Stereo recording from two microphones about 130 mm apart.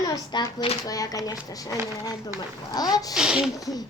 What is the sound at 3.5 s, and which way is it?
Speech, 25° left (ahead or behind).